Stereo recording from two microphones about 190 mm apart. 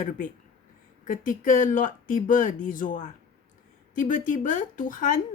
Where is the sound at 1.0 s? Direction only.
45° left (ahead or behind).